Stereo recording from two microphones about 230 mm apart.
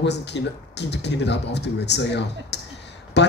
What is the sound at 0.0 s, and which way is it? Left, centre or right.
Speech, left.